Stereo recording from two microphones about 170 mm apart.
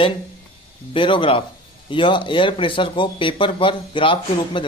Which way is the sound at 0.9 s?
30° left (ahead or behind).